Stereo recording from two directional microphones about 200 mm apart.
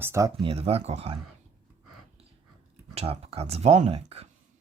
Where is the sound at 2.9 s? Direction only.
30° right (ahead or behind).